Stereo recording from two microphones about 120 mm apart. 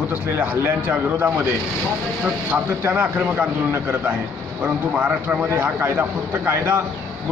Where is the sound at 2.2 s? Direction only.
15° right (ahead or behind).